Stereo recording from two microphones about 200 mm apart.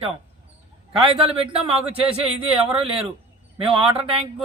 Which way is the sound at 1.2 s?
30° right (ahead or behind).